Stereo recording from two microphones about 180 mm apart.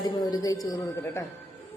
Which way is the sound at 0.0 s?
20° left (ahead or behind).